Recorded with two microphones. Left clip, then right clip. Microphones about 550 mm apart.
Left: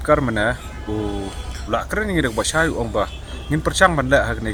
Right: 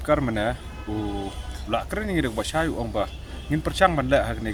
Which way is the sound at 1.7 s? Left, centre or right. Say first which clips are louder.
Left 5 dB; right.